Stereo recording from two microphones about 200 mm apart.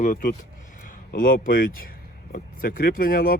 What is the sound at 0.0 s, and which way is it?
Speech, 40° left (ahead or behind).